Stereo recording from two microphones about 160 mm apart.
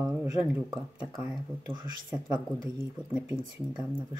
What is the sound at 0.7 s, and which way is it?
Speech, 5° right (ahead or behind).